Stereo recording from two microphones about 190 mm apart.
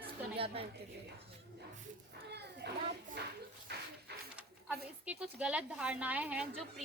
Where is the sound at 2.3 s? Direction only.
60° right (ahead or behind).